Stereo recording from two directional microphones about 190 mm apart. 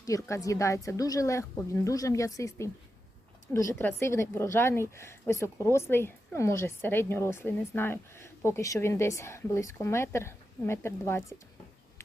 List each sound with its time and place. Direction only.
0.0 s speech: 15° left (ahead or behind)